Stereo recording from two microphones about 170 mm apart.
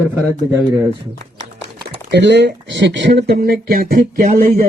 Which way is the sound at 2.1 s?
90° right.